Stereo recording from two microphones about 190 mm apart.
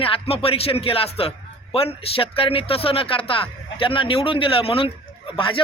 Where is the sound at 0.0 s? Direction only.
30° left (ahead or behind).